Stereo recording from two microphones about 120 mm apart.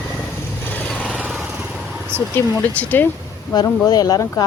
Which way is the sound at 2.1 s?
15° right (ahead or behind).